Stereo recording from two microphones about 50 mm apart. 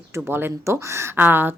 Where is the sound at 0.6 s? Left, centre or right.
Right.